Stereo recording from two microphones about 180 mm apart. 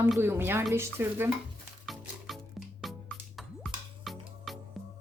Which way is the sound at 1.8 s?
Centre (ahead or behind).